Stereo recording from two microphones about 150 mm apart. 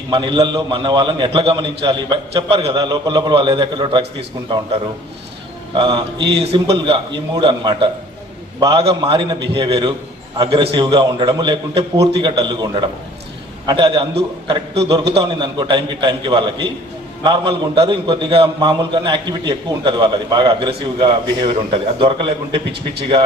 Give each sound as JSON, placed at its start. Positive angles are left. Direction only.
{"t": 0.1, "sound": "a man's voice", "side_deg": -30}